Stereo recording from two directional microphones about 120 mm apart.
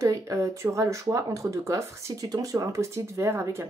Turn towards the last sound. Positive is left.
turn(degrees=-25)  # may be behind; listen again after turning